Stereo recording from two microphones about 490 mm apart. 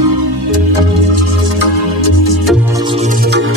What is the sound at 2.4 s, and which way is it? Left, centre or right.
Music, centre.